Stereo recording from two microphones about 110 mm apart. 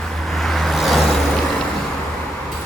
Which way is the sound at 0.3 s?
Centre (ahead or behind).